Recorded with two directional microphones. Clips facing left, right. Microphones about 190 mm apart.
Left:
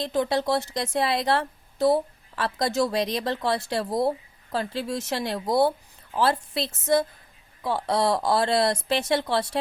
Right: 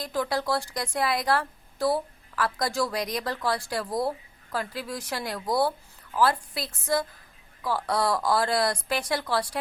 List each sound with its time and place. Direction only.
0.0 s speech: 25° left (ahead or behind)